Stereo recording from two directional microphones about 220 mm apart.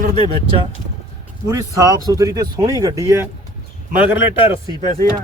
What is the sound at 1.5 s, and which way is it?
Speech, 15° right (ahead or behind).